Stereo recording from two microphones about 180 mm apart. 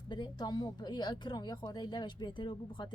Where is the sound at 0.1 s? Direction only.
25° left (ahead or behind).